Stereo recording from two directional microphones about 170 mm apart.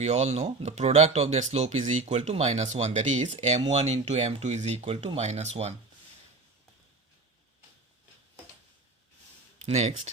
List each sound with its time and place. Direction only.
0.0 s speech: 40° right (ahead or behind)
9.6 s speech: 40° right (ahead or behind)